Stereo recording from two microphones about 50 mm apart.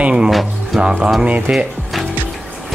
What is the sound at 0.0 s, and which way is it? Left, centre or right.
Speech, centre.